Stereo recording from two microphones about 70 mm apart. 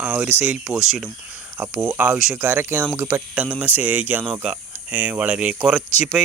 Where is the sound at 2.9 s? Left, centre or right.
Right.